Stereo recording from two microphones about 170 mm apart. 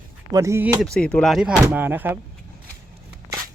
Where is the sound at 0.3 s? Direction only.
20° right (ahead or behind).